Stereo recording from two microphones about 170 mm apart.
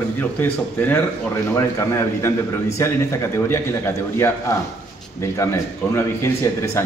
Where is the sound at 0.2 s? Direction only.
10° left (ahead or behind).